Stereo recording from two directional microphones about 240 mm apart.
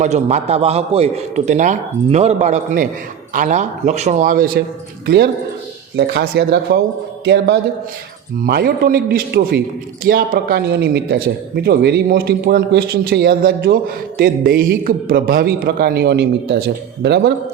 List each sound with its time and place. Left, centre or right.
0.0 s a man's voice: right